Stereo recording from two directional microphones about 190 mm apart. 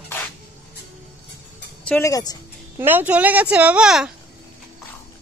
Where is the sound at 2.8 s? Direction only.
10° right (ahead or behind).